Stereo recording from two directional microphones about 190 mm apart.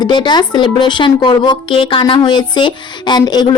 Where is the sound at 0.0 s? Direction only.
25° left (ahead or behind).